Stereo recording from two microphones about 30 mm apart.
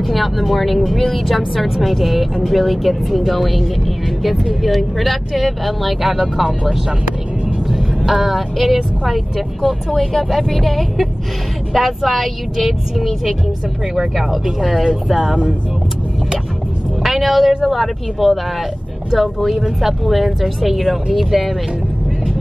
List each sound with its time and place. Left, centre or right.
0.0 s a woman's voice: centre
4.6 s a woman's voice: centre
8.2 s a woman's voice: centre
17.0 s a woman's voice: centre